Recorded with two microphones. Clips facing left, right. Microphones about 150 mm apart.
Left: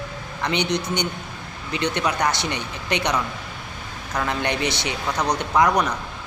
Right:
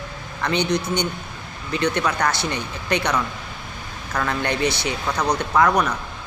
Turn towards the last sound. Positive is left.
turn(degrees=20)  # may be behind; listen again after turning